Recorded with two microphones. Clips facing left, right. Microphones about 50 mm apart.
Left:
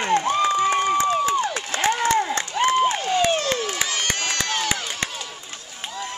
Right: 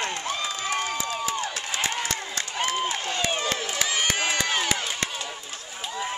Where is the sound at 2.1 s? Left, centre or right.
Left.